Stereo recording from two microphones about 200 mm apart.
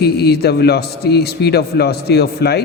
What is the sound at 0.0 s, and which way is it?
Mantra, 55° left (ahead or behind).